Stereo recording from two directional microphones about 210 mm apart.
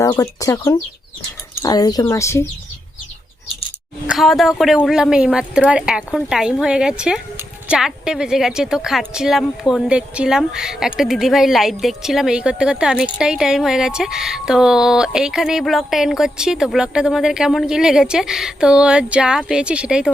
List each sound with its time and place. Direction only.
0.0 s speech: 15° left (ahead or behind)
4.0 s speech: centre (ahead or behind)